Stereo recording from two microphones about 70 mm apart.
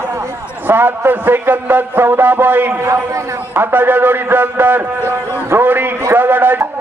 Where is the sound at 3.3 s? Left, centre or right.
Right.